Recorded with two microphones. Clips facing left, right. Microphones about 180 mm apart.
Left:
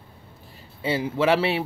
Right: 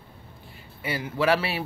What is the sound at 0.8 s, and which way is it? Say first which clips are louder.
Speech: left 3 dB; 25° left (ahead or behind).